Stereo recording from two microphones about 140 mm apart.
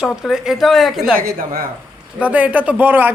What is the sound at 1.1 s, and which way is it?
Speech, 90° right.